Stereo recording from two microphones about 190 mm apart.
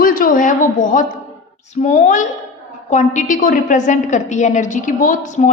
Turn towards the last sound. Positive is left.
turn(degrees=45)  # may be behind; listen again after turning